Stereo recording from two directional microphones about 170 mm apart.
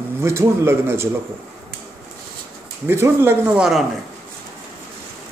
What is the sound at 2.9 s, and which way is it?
Speech, 15° right (ahead or behind).